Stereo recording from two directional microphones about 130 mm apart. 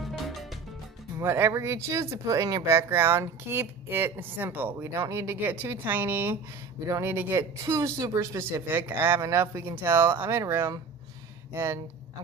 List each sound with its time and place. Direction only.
0.0 s music: centre (ahead or behind)
1.1 s a woman's voice: 20° right (ahead or behind)